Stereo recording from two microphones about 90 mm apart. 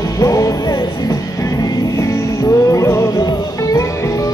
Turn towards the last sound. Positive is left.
turn(degrees=45)  # may be behind; listen again after turning